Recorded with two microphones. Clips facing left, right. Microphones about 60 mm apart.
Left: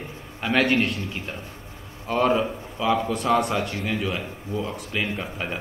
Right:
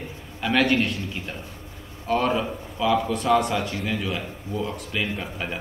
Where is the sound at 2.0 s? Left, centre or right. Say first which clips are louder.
Left 1 dB; centre.